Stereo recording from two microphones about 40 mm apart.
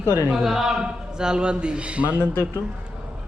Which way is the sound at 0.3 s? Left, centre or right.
Centre.